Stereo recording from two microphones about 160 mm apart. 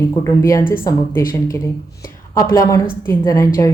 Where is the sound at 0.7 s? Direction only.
65° left (ahead or behind).